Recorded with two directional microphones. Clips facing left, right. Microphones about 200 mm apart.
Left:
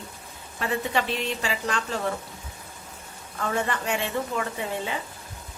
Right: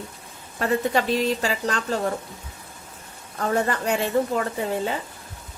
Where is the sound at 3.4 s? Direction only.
40° right (ahead or behind).